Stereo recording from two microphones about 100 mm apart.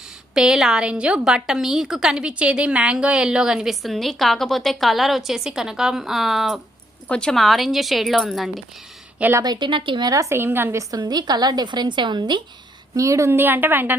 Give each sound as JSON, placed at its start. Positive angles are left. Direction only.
{"t": 0.3, "sound": "a woman's voice", "side_deg": -5}
{"t": 9.4, "sound": "a woman's voice", "side_deg": -45}
{"t": 10.1, "sound": "a woman's voice", "side_deg": -30}
{"t": 10.9, "sound": "a woman's voice", "side_deg": -40}
{"t": 12.9, "sound": "a woman's voice", "side_deg": -30}